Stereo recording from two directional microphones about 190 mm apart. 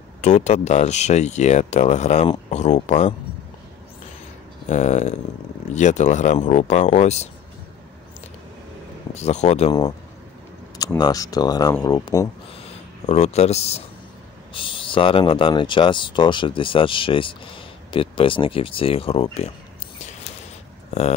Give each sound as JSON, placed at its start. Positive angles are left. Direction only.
{"t": 0.2, "sound": "speech", "side_deg": 35}
{"t": 4.6, "sound": "speech", "side_deg": 40}
{"t": 9.1, "sound": "speech", "side_deg": 35}
{"t": 9.7, "sound": "speech", "side_deg": 25}
{"t": 13.0, "sound": "speech", "side_deg": 35}